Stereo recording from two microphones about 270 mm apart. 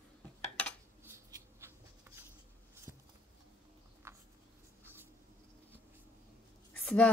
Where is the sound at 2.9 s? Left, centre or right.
Centre.